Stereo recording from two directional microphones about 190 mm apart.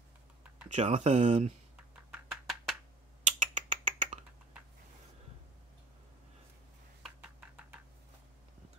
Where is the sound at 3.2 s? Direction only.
40° right (ahead or behind).